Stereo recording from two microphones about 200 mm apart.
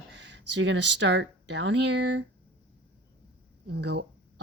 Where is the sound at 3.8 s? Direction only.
60° right (ahead or behind).